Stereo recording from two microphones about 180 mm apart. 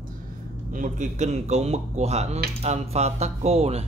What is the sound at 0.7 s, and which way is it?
Speech, 45° right (ahead or behind).